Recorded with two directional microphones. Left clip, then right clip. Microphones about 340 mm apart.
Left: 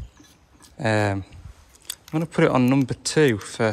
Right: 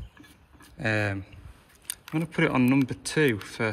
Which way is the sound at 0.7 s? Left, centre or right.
Centre.